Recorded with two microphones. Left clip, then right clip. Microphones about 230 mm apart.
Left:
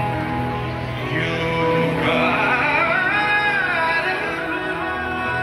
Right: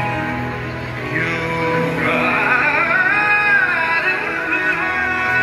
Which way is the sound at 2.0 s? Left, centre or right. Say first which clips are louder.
Right 3 dB; right.